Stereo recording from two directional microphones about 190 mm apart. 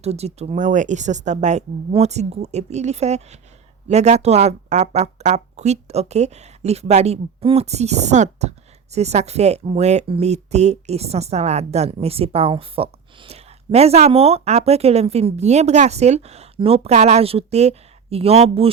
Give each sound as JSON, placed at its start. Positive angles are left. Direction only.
{"t": 0.0, "sound": "speech", "side_deg": -35}